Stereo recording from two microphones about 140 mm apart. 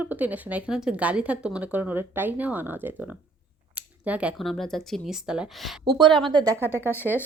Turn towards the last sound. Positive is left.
turn(degrees=15)  # may be behind; listen again after turning